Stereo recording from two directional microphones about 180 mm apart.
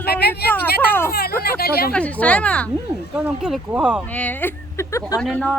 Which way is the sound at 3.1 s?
5° right (ahead or behind).